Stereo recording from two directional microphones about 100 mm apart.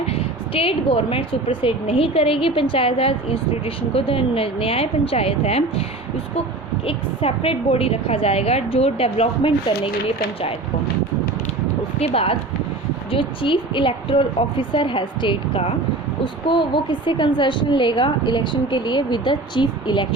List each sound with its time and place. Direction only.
0.1 s a woman's voice: 70° left (ahead or behind); by 5.8 s 90° left
6.8 s a woman's voice: 70° left (ahead or behind)
11.9 s a woman's voice: 80° left
13.1 s a woman's voice: 60° left (ahead or behind)